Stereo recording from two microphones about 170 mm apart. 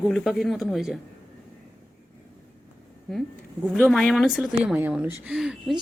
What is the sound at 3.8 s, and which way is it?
Speech, centre (ahead or behind).